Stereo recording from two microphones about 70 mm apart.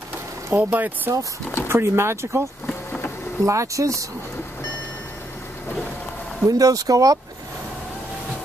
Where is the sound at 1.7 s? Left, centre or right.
Right.